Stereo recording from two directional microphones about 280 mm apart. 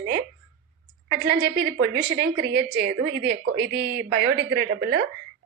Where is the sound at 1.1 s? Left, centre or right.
Right.